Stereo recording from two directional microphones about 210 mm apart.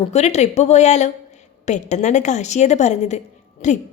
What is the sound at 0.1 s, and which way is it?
A woman's voice, 30° left (ahead or behind).